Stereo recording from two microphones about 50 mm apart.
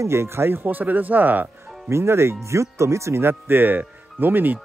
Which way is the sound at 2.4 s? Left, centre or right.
Right.